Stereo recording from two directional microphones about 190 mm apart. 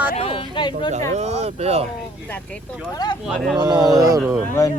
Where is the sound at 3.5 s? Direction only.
20° right (ahead or behind).